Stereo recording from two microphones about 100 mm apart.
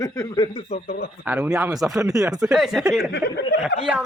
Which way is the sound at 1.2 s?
10° right (ahead or behind).